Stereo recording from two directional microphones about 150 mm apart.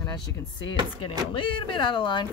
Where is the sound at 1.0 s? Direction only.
35° left (ahead or behind).